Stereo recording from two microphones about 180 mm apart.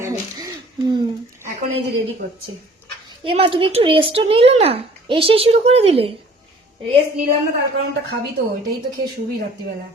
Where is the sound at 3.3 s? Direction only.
30° right (ahead or behind).